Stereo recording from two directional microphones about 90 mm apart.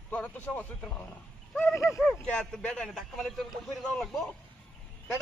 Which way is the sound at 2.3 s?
10° left (ahead or behind).